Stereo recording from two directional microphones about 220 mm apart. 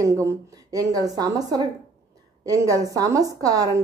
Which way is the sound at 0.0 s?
15° right (ahead or behind).